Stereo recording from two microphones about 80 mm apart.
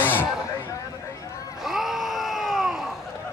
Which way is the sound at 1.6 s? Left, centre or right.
Centre.